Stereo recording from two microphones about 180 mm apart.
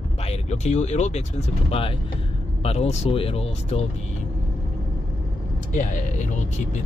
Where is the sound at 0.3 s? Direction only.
40° left (ahead or behind).